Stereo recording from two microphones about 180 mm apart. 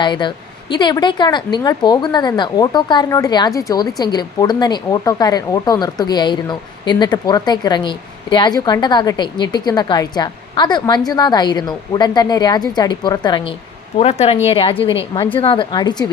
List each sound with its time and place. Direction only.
0.0 s speech: 25° left (ahead or behind)
14.0 s a woman's voice: 35° left (ahead or behind)